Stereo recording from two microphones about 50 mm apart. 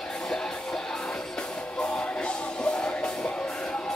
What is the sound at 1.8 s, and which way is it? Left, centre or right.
Music, centre.